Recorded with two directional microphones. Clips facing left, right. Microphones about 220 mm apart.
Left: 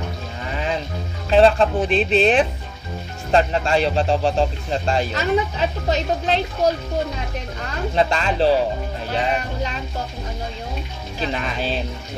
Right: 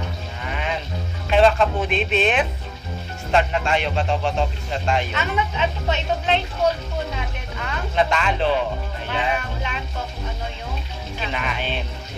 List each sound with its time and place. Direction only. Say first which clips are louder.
1.3 s speech: left 2 dB; 35° left (ahead or behind)
11.1 s speech: left 3 dB; 35° left (ahead or behind)